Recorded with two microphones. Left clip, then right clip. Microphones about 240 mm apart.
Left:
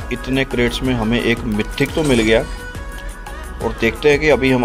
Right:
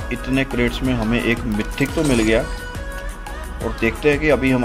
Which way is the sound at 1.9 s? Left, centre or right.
Centre.